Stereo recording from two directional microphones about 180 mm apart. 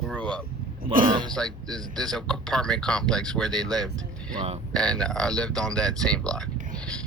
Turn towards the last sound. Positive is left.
turn(degrees=5)  # may be behind; listen again after turning